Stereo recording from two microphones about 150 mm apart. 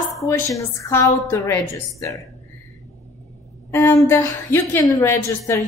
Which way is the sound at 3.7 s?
15° left (ahead or behind).